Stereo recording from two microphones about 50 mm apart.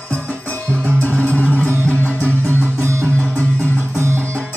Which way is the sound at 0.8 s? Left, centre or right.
Left.